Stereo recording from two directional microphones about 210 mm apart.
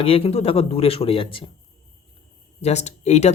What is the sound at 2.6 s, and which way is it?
Speech, 30° left (ahead or behind).